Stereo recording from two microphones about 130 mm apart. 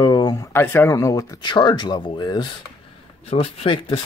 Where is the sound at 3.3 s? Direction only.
50° left (ahead or behind).